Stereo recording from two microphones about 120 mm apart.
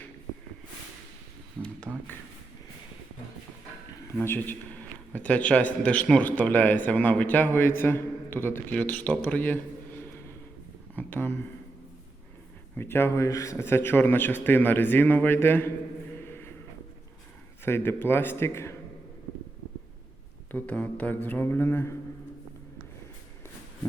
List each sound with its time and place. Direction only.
4.2 s a man's voice: 15° left (ahead or behind)
12.7 s a man's voice: 20° left (ahead or behind)
16.2 s a sound: 20° left (ahead or behind)
17.7 s speech: 20° left (ahead or behind)
20.5 s a man's voice: 15° left (ahead or behind)